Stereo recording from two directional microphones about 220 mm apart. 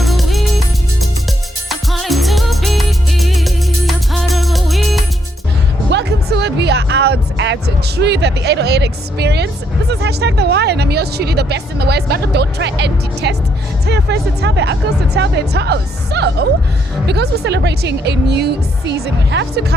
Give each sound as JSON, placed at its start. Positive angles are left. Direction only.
{"t": 0.0, "sound": "music", "side_deg": 0}
{"t": 1.9, "sound": "music", "side_deg": 0}
{"t": 5.9, "sound": "music", "side_deg": -50}
{"t": 9.9, "sound": "speech", "side_deg": -50}